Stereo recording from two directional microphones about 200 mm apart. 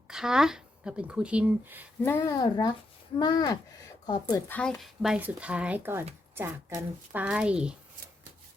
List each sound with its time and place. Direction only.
0.1 s speech: 5° right (ahead or behind)
2.0 s speech: 10° left (ahead or behind)
4.4 s speech: 10° left (ahead or behind)